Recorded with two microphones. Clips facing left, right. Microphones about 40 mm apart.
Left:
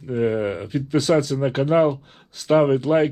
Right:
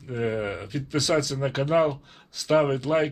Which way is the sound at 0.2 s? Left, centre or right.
Centre.